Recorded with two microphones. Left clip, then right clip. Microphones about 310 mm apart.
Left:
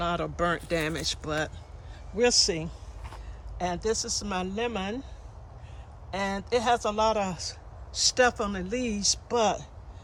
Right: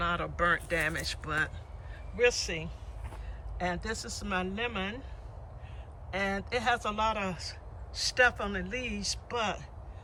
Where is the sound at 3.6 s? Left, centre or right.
Centre.